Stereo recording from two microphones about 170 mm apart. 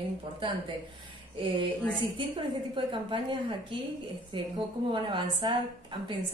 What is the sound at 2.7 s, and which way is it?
A woman's voice, 30° right (ahead or behind).